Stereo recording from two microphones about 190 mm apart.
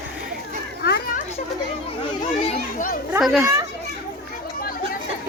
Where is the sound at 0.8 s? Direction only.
55° left (ahead or behind).